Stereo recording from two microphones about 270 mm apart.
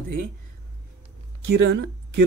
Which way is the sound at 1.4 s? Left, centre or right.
Right.